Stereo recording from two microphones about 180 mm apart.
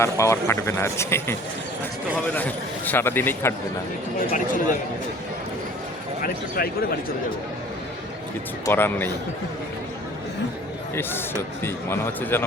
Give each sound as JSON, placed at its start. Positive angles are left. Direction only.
{"t": 0.0, "sound": "speech", "side_deg": 15}
{"t": 4.3, "sound": "a man's voice", "side_deg": 45}
{"t": 6.6, "sound": "a man's voice", "side_deg": 55}
{"t": 8.6, "sound": "speech", "side_deg": 10}
{"t": 11.6, "sound": "speech", "side_deg": 10}